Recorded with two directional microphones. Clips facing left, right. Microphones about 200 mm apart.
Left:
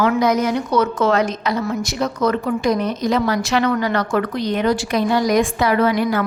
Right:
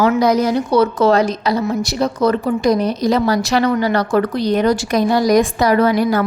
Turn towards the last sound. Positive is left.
turn(degrees=-40)  # may be behind; listen again after turning